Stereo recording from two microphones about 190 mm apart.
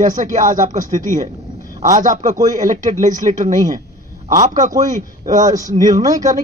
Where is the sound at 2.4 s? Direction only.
20° right (ahead or behind).